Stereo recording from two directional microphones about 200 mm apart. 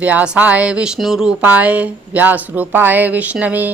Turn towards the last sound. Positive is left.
turn(degrees=-10)  # may be behind; listen again after turning